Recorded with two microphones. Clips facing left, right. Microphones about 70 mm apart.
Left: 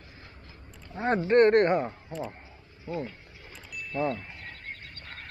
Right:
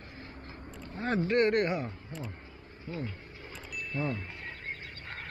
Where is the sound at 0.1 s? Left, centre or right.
Right.